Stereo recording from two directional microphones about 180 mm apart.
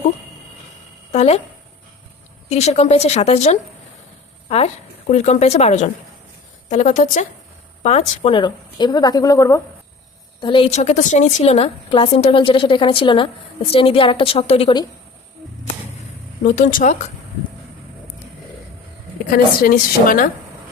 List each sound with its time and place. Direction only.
1.1 s speech: 35° left (ahead or behind)
2.5 s a woman's voice: 40° left (ahead or behind)
10.7 s a woman's voice: 40° left (ahead or behind)
16.4 s a woman's voice: 45° left (ahead or behind)
19.3 s a woman's voice: 55° left (ahead or behind)